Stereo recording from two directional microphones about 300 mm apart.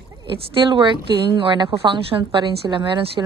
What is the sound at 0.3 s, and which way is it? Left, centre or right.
Speech, centre.